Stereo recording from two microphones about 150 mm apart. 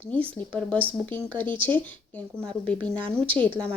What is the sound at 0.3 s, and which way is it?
A woman's voice, 10° left (ahead or behind).